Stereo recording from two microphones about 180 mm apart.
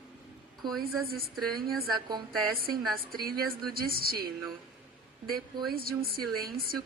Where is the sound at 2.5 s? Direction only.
55° right (ahead or behind).